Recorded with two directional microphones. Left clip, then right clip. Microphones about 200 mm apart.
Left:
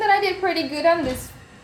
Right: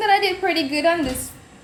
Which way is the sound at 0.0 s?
5° right (ahead or behind).